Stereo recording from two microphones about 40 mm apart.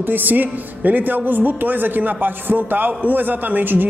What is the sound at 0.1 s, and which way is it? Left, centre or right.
A man's voice, right.